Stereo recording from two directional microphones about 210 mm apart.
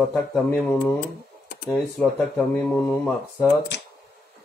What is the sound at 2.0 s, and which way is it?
Speech, 5° left (ahead or behind).